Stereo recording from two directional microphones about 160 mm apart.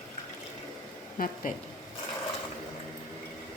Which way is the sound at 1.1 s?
55° left (ahead or behind).